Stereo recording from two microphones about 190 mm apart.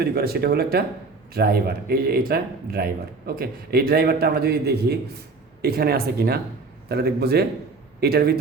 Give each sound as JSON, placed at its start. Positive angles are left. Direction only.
{"t": 0.0, "sound": "speech", "side_deg": -55}